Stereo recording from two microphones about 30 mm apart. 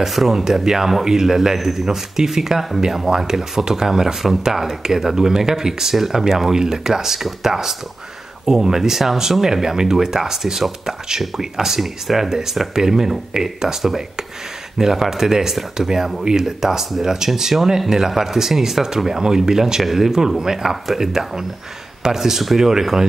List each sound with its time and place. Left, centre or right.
0.0 s speech: centre
0.3 s speech: centre